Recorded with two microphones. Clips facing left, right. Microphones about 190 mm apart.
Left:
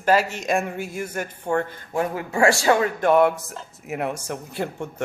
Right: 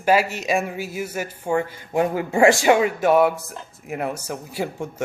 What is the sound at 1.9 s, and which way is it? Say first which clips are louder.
Speech: right 4 dB; 20° right (ahead or behind).